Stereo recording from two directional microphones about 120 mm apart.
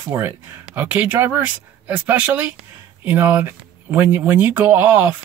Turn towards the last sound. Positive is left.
turn(degrees=-15)  # may be behind; listen again after turning